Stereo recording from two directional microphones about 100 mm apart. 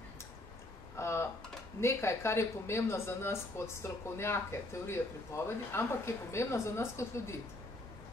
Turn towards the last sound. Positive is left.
turn(degrees=25)  # may be behind; listen again after turning